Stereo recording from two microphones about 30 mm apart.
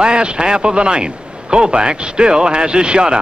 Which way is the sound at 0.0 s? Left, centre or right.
Right.